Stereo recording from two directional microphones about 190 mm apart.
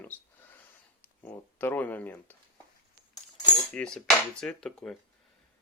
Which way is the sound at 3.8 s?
5° left (ahead or behind).